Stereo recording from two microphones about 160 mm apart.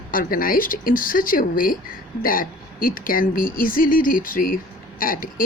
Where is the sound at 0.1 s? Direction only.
60° left (ahead or behind).